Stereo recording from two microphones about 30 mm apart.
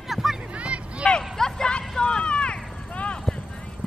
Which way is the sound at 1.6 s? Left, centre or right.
Left.